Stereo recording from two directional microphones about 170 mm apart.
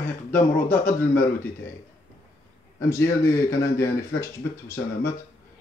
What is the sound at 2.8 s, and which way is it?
Speech, 15° left (ahead or behind).